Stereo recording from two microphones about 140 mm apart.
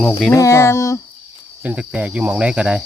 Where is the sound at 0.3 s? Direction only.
20° left (ahead or behind).